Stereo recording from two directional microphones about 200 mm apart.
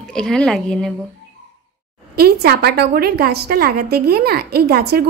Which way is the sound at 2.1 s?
50° right (ahead or behind).